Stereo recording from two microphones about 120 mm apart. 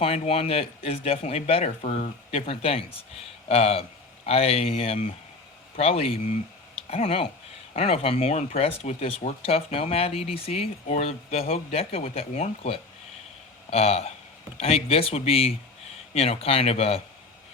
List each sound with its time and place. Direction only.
0.0 s speech: 55° left (ahead or behind)